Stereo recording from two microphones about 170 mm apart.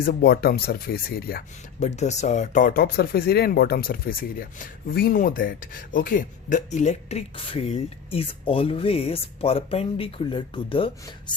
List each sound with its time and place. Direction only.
0.0 s speech: 65° left (ahead or behind)
1.8 s speech: 40° left (ahead or behind)